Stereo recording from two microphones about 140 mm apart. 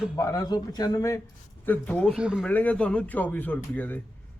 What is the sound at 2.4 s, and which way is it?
Speech, 10° left (ahead or behind).